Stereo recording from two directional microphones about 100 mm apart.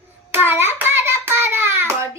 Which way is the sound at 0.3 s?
20° right (ahead or behind).